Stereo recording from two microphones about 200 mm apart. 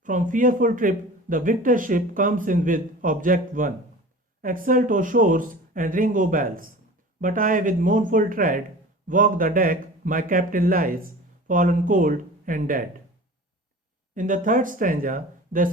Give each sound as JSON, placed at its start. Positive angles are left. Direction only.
{"t": 0.0, "sound": "a man's voice", "side_deg": -40}
{"t": 14.2, "sound": "speech", "side_deg": -40}